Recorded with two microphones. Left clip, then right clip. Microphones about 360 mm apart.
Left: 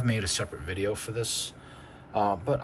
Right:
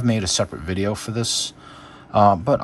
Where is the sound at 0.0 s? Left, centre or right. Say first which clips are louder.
Right 9 dB; centre.